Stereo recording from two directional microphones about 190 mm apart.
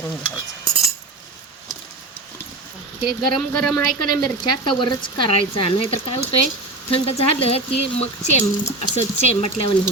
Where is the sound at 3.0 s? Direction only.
25° left (ahead or behind).